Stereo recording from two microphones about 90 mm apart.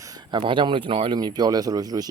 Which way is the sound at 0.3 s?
65° right (ahead or behind).